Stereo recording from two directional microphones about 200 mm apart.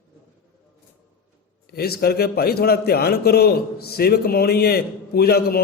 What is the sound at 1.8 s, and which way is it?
A man's voice, 50° left (ahead or behind).